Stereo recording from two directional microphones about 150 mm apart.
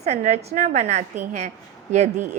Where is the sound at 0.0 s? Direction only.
50° right (ahead or behind).